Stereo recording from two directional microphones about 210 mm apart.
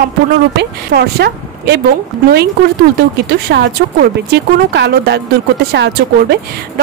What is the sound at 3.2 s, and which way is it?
A woman's voice, 50° right (ahead or behind).